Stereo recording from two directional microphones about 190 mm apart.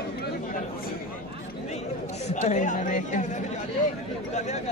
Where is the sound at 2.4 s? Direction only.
40° left (ahead or behind).